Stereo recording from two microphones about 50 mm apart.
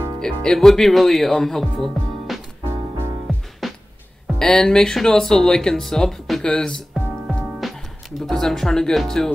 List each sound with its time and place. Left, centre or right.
0.2 s speech: centre
3.3 s music: centre
4.4 s speech: centre
6.4 s speech: centre